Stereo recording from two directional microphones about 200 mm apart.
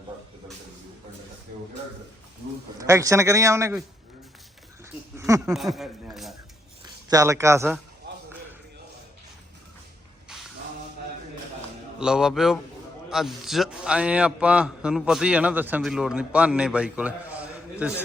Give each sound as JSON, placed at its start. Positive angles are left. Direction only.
{"t": 2.7, "sound": "a man's voice", "side_deg": -15}
{"t": 5.1, "sound": "a sound", "side_deg": -15}
{"t": 5.5, "sound": "a man's voice", "side_deg": 0}
{"t": 6.8, "sound": "speech", "side_deg": -15}
{"t": 8.1, "sound": "a sound", "side_deg": -55}
{"t": 11.9, "sound": "a man's voice", "side_deg": -5}